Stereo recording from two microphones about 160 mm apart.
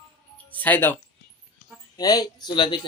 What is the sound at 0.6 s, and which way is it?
Speech, 10° left (ahead or behind).